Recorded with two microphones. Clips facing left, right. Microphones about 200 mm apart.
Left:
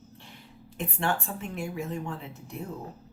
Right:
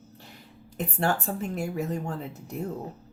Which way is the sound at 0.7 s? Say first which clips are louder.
Right 3 dB; 40° right (ahead or behind).